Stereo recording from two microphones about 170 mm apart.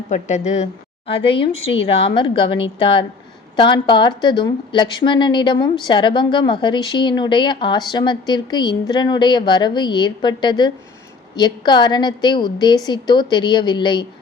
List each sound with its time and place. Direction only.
0.1 s a woman's voice: 45° left (ahead or behind); by 14.0 s 25° left (ahead or behind)